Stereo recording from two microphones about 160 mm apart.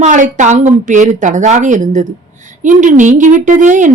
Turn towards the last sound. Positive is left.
turn(degrees=-50)  # may be behind; listen again after turning